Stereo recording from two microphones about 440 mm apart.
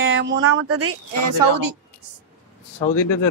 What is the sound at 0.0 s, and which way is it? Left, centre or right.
Speech, right.